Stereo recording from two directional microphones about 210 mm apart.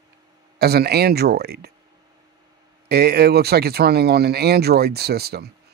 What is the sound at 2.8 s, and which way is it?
Speech, 50° right (ahead or behind).